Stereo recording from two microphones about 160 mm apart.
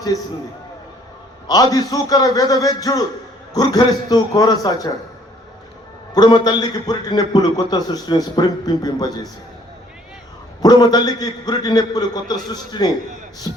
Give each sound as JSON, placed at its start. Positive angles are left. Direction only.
{"t": 1.5, "sound": "a man's voice", "side_deg": 25}
{"t": 6.1, "sound": "a man's voice", "side_deg": 25}
{"t": 10.6, "sound": "a man's voice", "side_deg": 25}